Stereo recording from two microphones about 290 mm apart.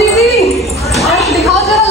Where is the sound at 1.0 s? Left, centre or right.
Left.